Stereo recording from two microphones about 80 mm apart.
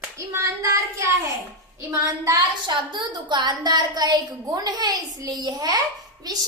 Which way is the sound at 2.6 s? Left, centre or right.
Right.